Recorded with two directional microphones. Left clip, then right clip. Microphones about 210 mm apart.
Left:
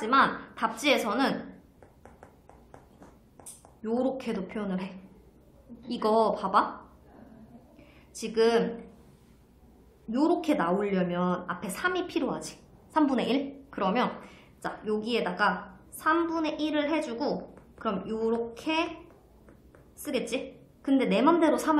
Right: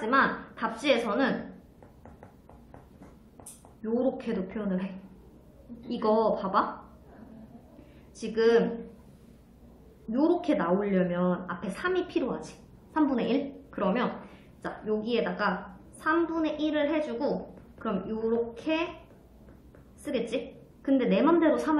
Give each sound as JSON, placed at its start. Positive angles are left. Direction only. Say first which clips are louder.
{"t": 0.0, "sound": "a woman's voice", "louder": "left 1 dB", "side_deg": 40}
{"t": 3.8, "sound": "a woman's voice", "louder": "even", "side_deg": 45}
{"t": 5.9, "sound": "a woman's voice", "louder": "even", "side_deg": 45}
{"t": 8.2, "sound": "a woman's voice", "louder": "right 1 dB", "side_deg": 45}
{"t": 10.1, "sound": "a woman's voice", "louder": "even", "side_deg": 45}
{"t": 20.1, "sound": "a woman's voice", "louder": "even", "side_deg": 45}